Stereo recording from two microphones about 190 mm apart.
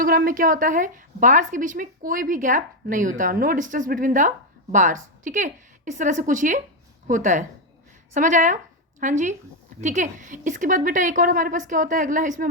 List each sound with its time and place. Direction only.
0.0 s a woman's voice: 50° right (ahead or behind)